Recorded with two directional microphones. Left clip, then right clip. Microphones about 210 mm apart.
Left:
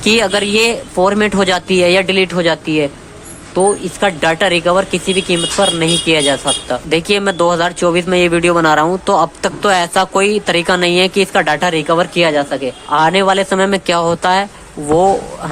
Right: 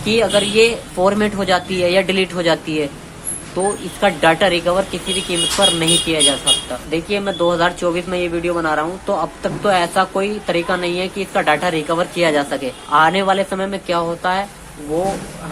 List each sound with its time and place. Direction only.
0.0 s a man's voice: 35° left (ahead or behind)